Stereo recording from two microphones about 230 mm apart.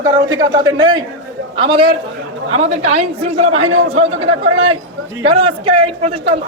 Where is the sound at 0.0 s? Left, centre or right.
Centre.